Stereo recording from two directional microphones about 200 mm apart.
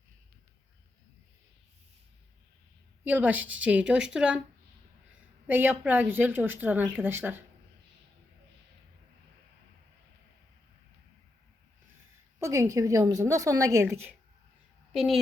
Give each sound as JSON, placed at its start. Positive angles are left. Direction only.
{"t": 3.0, "sound": "speech", "side_deg": -10}
{"t": 5.5, "sound": "speech", "side_deg": -10}
{"t": 12.4, "sound": "speech", "side_deg": -15}